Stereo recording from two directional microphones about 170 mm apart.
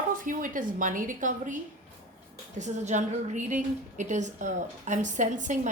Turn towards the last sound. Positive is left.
turn(degrees=-50)  # may be behind; listen again after turning